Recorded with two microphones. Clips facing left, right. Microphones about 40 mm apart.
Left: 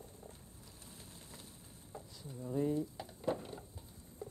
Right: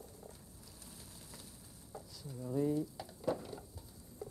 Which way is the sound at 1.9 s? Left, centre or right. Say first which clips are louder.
Right 1 dB; left.